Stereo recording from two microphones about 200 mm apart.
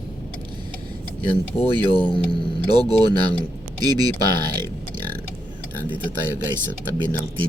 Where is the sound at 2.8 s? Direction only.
20° right (ahead or behind).